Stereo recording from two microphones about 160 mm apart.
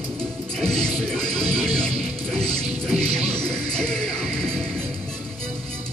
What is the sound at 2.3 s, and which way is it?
Music, 40° right (ahead or behind).